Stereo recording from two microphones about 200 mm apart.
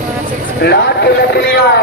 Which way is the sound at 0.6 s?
55° left (ahead or behind).